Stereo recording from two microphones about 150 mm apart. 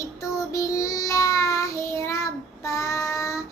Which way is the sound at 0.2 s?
20° left (ahead or behind).